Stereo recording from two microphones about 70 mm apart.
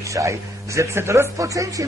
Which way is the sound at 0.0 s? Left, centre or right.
Right.